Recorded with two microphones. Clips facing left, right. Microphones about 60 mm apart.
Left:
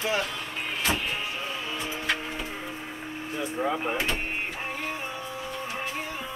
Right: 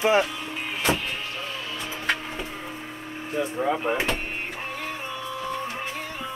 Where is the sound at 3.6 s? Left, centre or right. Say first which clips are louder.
Right 2 dB; centre.